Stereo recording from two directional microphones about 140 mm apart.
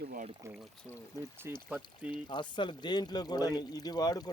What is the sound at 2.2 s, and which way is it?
Speech, 35° left (ahead or behind).